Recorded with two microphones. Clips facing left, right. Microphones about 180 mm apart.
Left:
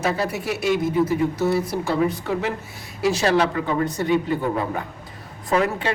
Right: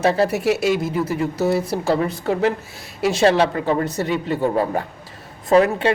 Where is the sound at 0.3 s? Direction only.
75° right (ahead or behind).